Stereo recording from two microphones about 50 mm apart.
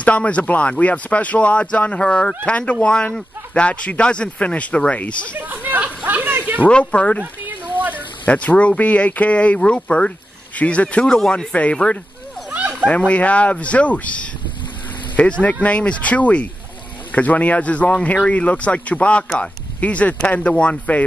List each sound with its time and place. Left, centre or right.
0.0 s speech: left
5.5 s a sound: right
6.7 s speech: left
8.3 s speech: left
11.1 s speech: centre
11.5 s speech: left
12.4 s a sound: right
12.8 s speech: left